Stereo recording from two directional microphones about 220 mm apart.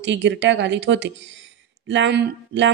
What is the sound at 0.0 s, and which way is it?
A woman's voice, 55° right (ahead or behind).